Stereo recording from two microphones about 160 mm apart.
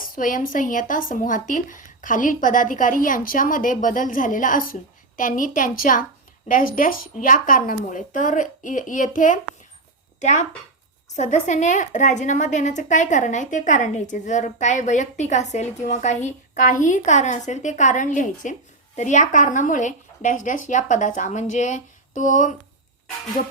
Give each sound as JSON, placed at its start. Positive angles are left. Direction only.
{"t": 0.0, "sound": "speech", "side_deg": 60}
{"t": 11.2, "sound": "a woman's voice", "side_deg": 50}